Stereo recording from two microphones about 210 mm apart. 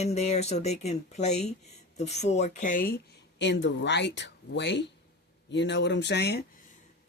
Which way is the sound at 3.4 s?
55° left (ahead or behind).